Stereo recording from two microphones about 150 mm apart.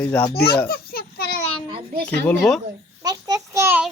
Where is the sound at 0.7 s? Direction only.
90° left.